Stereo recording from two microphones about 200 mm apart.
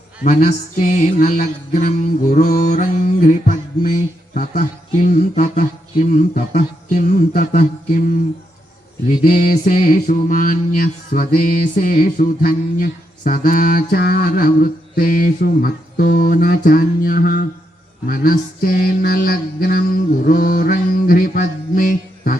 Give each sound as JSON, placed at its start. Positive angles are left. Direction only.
{"t": 0.2, "sound": "music", "side_deg": 40}
{"t": 9.2, "sound": "mantra", "side_deg": 45}